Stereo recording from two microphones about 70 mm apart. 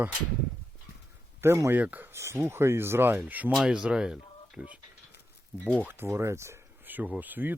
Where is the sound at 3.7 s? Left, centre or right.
Centre.